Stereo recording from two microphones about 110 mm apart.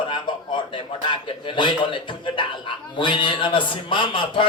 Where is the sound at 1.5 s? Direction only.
50° left (ahead or behind).